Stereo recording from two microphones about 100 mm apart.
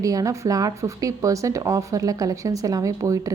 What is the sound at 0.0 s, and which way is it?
Speech, 35° right (ahead or behind).